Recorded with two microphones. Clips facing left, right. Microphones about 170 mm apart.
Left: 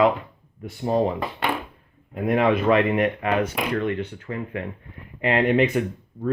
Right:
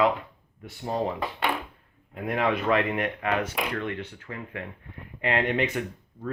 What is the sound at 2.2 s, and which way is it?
Speech, 20° left (ahead or behind).